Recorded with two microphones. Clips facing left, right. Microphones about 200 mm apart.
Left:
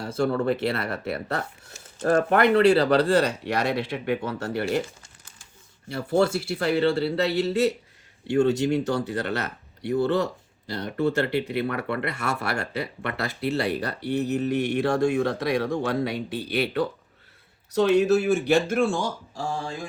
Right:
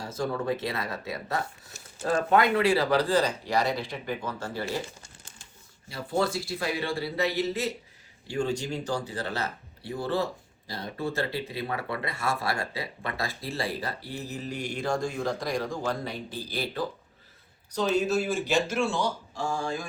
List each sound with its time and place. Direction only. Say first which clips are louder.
0.0 s speech: left 6 dB; 65° left (ahead or behind)
5.9 s speech: left 6 dB; 65° left (ahead or behind); by 19.5 s 45° left (ahead or behind)